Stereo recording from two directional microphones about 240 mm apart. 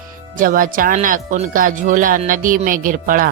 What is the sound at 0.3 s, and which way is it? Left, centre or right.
Speech, right.